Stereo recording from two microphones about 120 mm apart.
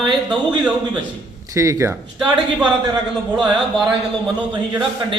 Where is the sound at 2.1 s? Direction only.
10° right (ahead or behind).